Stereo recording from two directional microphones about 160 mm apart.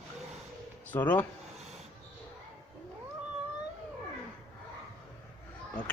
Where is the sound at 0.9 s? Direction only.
10° left (ahead or behind).